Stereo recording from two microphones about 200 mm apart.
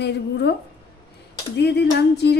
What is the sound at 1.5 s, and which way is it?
Speech, 55° left (ahead or behind).